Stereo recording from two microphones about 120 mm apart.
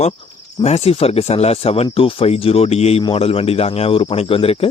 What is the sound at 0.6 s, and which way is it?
Speech, 60° left (ahead or behind).